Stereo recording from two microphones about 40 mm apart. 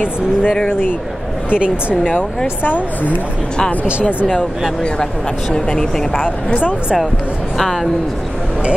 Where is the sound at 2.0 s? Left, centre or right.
Left.